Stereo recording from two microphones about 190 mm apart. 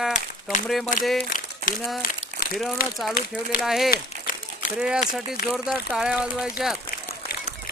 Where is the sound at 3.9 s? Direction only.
45° left (ahead or behind).